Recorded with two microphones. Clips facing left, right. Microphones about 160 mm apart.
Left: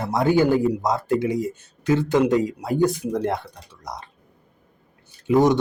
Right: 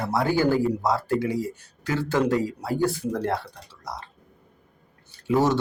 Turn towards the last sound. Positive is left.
turn(degrees=15)  # may be behind; listen again after turning